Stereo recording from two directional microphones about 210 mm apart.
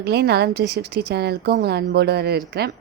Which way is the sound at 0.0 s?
50° right (ahead or behind).